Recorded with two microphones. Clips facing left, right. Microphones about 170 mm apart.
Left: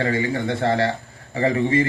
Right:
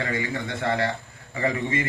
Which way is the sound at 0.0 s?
30° left (ahead or behind).